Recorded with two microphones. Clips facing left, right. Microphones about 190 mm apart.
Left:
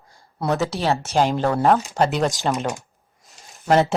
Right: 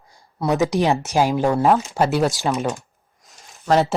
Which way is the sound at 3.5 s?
Centre (ahead or behind).